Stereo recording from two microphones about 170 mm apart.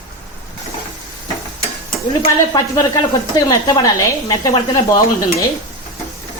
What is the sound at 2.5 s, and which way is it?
Speech, 20° left (ahead or behind).